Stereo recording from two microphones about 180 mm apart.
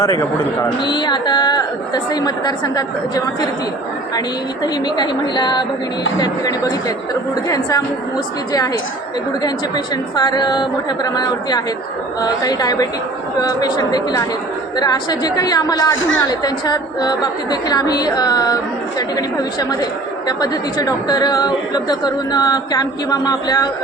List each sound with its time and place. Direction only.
0.9 s a woman's voice: 25° left (ahead or behind)
4.6 s a woman's voice: 25° left (ahead or behind)
9.4 s a woman's voice: 20° left (ahead or behind)